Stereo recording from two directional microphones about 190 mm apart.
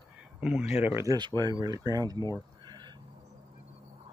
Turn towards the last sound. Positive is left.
turn(degrees=-20)  # may be behind; listen again after turning